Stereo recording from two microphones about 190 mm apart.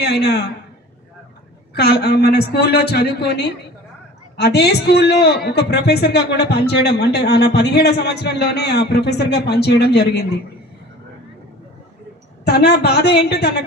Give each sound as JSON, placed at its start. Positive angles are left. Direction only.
{"t": 0.0, "sound": "a man's voice", "side_deg": 60}
{"t": 1.7, "sound": "a man's voice", "side_deg": 60}
{"t": 12.5, "sound": "a man's voice", "side_deg": 60}